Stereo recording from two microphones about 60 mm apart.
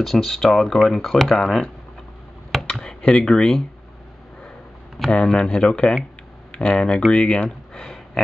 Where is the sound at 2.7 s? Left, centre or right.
Centre.